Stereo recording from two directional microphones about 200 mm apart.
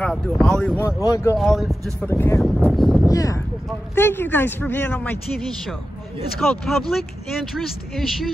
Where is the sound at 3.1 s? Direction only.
15° left (ahead or behind).